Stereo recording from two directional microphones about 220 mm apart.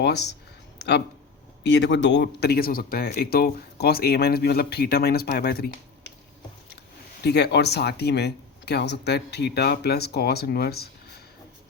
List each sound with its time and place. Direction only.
0.0 s speech: 50° left (ahead or behind)
7.3 s speech: 50° left (ahead or behind)